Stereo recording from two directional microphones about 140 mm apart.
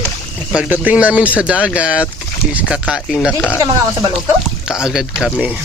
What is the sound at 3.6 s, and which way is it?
Speech, 25° right (ahead or behind).